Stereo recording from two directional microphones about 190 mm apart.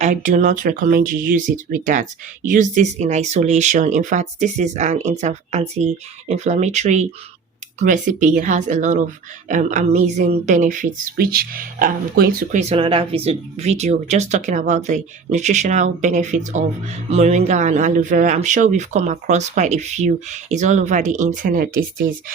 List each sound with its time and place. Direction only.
0.0 s a woman's voice: 40° right (ahead or behind)
12.5 s speech: 30° right (ahead or behind); by 22.1 s 45° right (ahead or behind)